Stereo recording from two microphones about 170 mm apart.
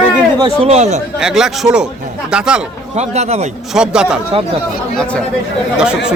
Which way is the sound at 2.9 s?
40° right (ahead or behind).